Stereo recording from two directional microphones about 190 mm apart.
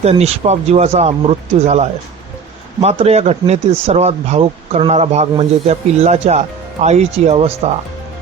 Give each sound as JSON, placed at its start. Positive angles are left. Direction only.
{"t": 0.0, "sound": "speech", "side_deg": -35}